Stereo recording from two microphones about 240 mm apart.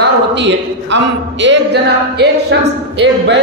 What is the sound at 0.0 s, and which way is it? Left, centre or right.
A man's voice, right.